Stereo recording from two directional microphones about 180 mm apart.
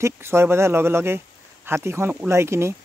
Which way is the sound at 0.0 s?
15° right (ahead or behind).